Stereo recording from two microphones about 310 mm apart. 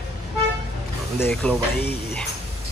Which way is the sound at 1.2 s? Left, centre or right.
Centre.